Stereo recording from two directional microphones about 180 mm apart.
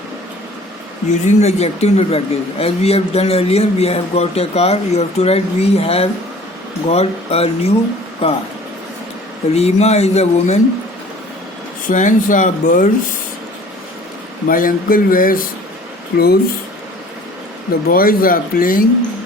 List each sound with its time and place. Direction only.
1.2 s speech: 40° left (ahead or behind)
9.6 s speech: 35° left (ahead or behind)
11.9 s speech: 45° left (ahead or behind)
14.4 s speech: 50° left (ahead or behind)
17.8 s speech: 55° left (ahead or behind)